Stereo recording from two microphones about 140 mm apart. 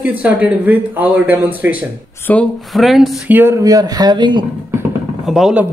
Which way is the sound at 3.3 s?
15° right (ahead or behind).